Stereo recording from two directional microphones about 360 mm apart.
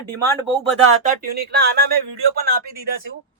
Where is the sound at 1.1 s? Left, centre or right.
Right.